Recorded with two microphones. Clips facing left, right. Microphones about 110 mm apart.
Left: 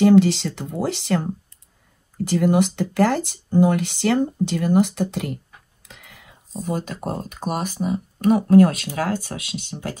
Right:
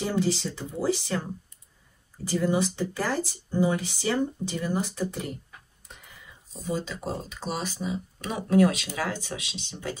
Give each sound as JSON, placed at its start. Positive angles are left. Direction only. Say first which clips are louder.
{"t": 0.0, "sound": "speech", "louder": "left 12 dB", "side_deg": 70}
{"t": 6.6, "sound": "speech", "louder": "left 4 dB", "side_deg": 55}